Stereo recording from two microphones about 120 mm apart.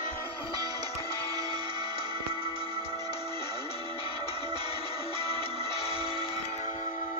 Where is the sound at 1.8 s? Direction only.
55° left (ahead or behind).